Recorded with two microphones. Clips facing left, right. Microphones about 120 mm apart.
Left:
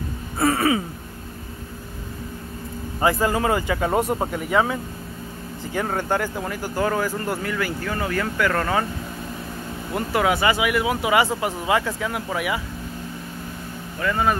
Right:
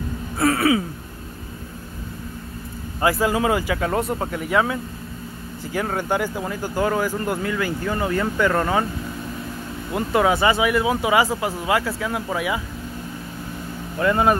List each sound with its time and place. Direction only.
0.4 s speech: centre (ahead or behind)
3.0 s speech: 5° right (ahead or behind)
3.8 s speech: 5° left (ahead or behind); by 8.8 s 10° right (ahead or behind)
9.9 s speech: 20° right (ahead or behind)
11.1 s speech: 10° right (ahead or behind)